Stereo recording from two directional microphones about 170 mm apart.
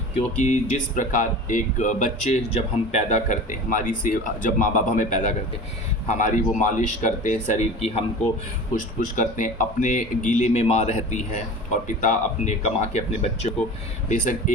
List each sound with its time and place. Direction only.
0.4 s speech: 45° left (ahead or behind)